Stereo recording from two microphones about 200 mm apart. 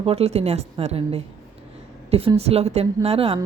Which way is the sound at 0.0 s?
30° right (ahead or behind).